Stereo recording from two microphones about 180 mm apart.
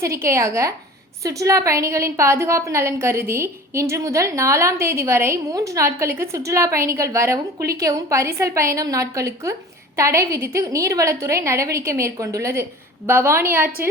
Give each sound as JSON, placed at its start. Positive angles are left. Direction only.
{"t": 0.0, "sound": "a woman's voice", "side_deg": -15}